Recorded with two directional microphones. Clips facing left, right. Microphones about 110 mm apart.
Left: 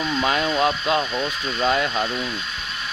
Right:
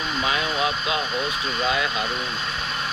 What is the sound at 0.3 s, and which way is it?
Speech, 45° left (ahead or behind).